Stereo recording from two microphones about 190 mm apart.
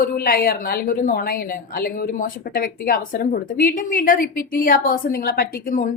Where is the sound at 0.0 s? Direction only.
50° left (ahead or behind).